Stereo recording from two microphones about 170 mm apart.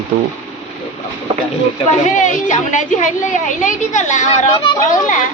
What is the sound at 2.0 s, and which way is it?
A woman's voice, 45° left (ahead or behind).